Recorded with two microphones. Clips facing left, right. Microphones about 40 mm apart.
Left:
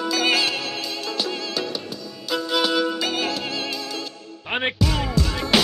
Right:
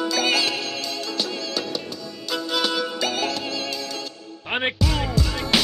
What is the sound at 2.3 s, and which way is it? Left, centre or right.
Music, centre.